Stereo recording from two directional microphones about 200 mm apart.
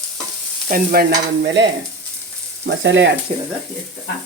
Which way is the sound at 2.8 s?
65° right (ahead or behind).